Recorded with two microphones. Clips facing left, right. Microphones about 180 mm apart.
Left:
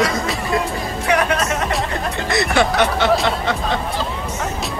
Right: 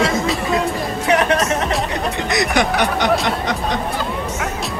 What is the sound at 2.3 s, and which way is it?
Speech, 15° right (ahead or behind).